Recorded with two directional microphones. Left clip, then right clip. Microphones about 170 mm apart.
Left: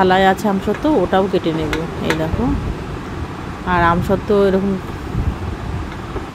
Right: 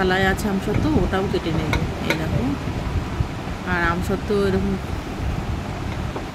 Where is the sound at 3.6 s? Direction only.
20° left (ahead or behind).